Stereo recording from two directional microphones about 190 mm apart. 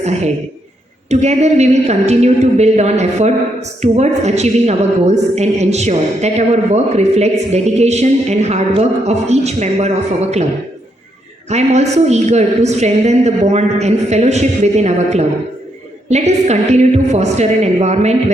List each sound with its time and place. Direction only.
1.1 s a woman's voice: 35° right (ahead or behind)
11.4 s a woman's voice: 35° right (ahead or behind)